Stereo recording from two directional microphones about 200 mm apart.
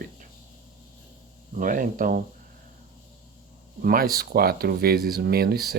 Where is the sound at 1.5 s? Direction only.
40° right (ahead or behind).